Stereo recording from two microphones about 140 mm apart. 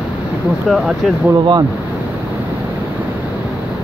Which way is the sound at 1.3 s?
35° right (ahead or behind).